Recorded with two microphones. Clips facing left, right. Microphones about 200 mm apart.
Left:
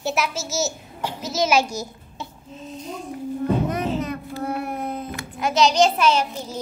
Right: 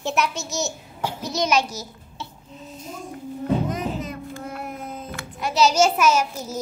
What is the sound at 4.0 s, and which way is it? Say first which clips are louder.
Child singing: left 4 dB; 65° left (ahead or behind).